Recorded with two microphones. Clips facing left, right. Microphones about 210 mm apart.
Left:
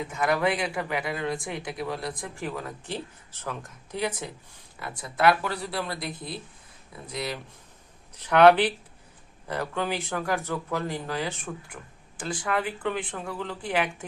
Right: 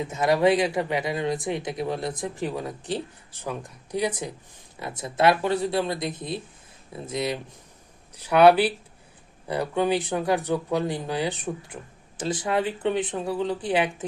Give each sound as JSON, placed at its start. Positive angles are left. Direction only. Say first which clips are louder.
{"t": 0.0, "sound": "speech", "louder": "right 5 dB", "side_deg": -20}
{"t": 8.1, "sound": "speech", "louder": "right 1 dB", "side_deg": -10}